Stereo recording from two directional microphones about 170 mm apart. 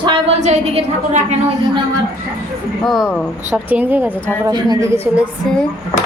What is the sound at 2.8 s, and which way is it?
Speech, centre (ahead or behind).